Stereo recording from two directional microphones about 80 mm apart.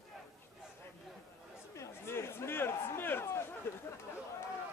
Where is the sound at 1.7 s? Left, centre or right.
Left.